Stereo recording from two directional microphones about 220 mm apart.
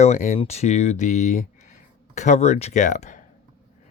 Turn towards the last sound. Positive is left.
turn(degrees=35)  # may be behind; listen again after turning